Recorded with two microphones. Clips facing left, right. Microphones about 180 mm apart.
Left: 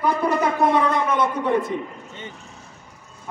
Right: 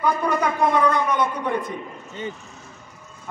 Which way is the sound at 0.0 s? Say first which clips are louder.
Left 1 dB; 30° left (ahead or behind).